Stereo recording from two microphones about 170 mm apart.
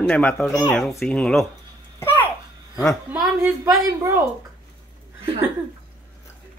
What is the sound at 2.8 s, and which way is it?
Speech, centre (ahead or behind).